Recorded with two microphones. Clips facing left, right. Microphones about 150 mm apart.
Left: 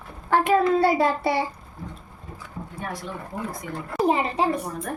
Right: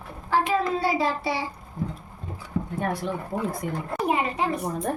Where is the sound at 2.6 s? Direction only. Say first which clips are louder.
Right 9 dB; 80° right.